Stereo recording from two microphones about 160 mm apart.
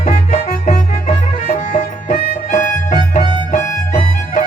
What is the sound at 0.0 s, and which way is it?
Music, 45° left (ahead or behind).